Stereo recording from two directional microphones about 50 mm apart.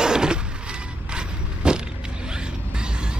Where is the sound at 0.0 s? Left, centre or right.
Centre.